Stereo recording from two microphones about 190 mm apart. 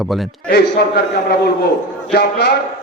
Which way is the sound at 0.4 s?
55° left (ahead or behind).